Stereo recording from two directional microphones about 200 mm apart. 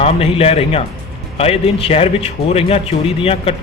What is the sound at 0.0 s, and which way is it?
A man's voice, 30° left (ahead or behind).